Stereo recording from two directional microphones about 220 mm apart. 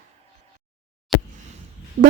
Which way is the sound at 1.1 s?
Centre (ahead or behind).